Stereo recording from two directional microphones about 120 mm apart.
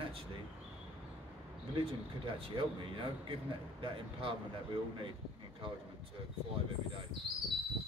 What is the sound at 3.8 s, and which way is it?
Speech, 50° right (ahead or behind).